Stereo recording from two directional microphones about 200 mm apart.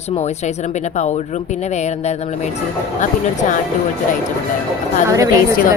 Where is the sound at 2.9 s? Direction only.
40° left (ahead or behind).